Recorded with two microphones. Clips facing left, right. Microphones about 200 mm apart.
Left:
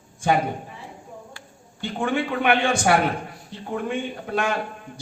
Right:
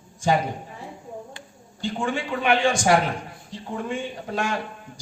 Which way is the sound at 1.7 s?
55° left (ahead or behind).